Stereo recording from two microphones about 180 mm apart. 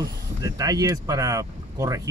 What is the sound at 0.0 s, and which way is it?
Speech, 20° right (ahead or behind).